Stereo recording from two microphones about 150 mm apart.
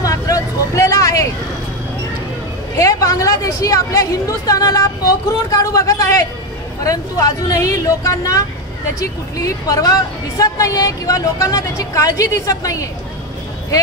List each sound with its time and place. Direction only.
0.0 s vehicle: 20° left (ahead or behind)
2.8 s a woman's voice: 20° left (ahead or behind)